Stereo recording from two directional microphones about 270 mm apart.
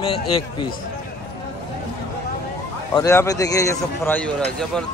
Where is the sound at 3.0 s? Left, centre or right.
Centre.